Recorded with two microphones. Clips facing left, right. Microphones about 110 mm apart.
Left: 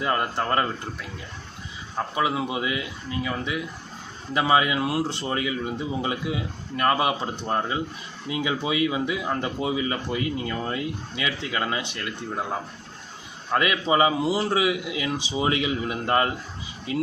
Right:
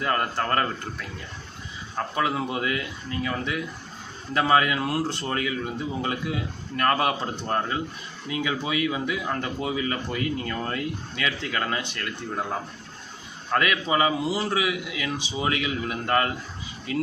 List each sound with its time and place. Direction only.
0.0 s speech: 20° left (ahead or behind)
2.1 s a man's voice: 10° left (ahead or behind)